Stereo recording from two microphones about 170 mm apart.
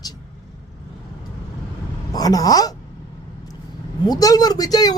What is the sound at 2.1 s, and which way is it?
Speech, 20° left (ahead or behind).